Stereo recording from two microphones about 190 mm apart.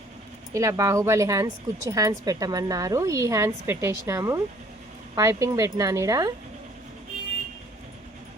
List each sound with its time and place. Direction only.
0.5 s speech: 15° right (ahead or behind)